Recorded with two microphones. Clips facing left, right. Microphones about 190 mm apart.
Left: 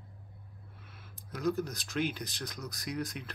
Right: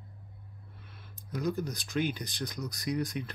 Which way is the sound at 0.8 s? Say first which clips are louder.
Right 1 dB; 5° left (ahead or behind).